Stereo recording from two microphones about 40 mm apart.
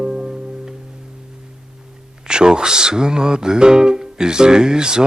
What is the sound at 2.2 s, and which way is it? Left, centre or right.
Music, centre.